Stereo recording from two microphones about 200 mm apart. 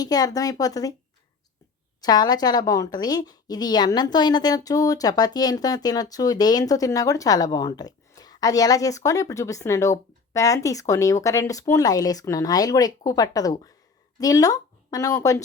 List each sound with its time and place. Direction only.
0.0 s speech: 20° left (ahead or behind)
2.0 s a woman's voice: 20° left (ahead or behind)